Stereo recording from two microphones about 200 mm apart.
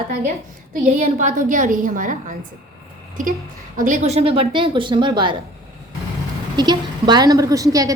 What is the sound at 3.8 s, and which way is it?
A woman's voice, 35° right (ahead or behind).